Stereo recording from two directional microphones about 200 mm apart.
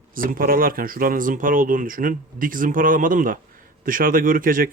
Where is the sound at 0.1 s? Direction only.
45° right (ahead or behind).